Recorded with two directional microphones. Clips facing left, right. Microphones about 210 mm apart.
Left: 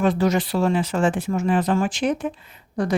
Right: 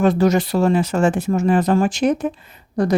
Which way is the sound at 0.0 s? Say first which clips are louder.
Right 4 dB; 40° right (ahead or behind).